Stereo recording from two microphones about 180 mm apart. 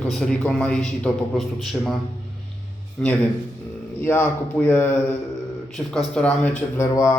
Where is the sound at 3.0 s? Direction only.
5° left (ahead or behind).